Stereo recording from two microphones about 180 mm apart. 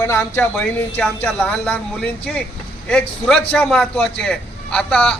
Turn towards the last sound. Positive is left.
turn(degrees=5)  # may be behind; listen again after turning